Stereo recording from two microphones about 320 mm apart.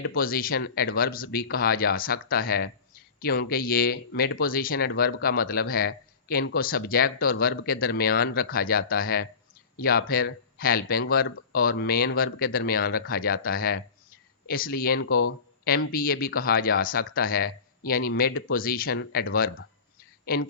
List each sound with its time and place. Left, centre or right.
0.0 s a woman's voice: left